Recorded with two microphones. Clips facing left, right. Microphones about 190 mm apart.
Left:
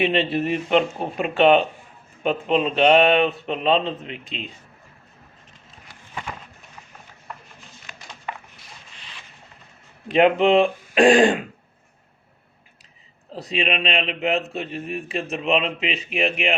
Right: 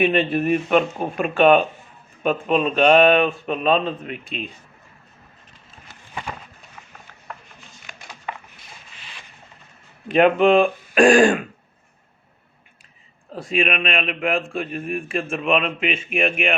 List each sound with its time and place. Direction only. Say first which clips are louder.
0.0 s a man's voice: right 2 dB; 25° left (ahead or behind)
10.1 s a man's voice: right 1 dB; 25° left (ahead or behind)
13.3 s a man's voice: right 2 dB; 25° left (ahead or behind)